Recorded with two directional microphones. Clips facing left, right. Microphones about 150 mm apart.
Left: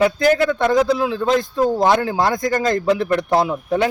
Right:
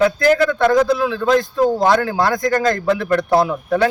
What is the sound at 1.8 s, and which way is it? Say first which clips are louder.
Speech: right 1 dB; 20° left (ahead or behind).